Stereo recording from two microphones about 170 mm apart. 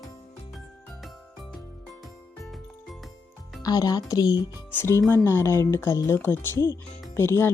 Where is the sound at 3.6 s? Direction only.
20° left (ahead or behind).